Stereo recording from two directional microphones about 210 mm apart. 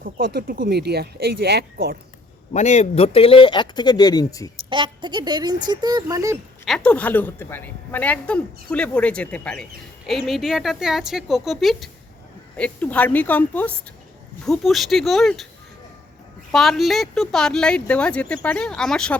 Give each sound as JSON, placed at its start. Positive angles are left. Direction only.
{"t": 0.0, "sound": "speech", "side_deg": -45}
{"t": 2.5, "sound": "speech", "side_deg": 30}
{"t": 4.5, "sound": "a woman's voice", "side_deg": -25}
{"t": 6.7, "sound": "a woman's voice", "side_deg": 5}
{"t": 16.5, "sound": "speech", "side_deg": 0}